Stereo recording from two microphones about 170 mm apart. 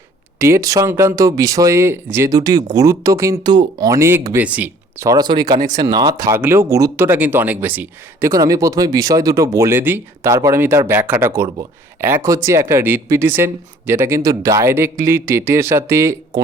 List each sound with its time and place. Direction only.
0.3 s speech: 15° right (ahead or behind)